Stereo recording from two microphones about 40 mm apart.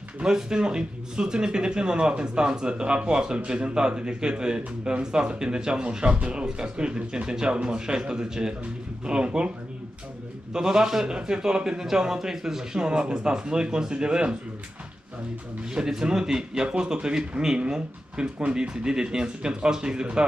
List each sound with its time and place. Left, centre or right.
0.2 s speech: centre
10.5 s speech: centre
15.7 s a man's voice: centre